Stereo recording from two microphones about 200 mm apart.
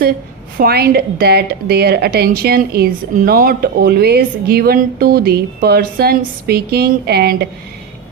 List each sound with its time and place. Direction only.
0.6 s a woman's voice: 50° right (ahead or behind)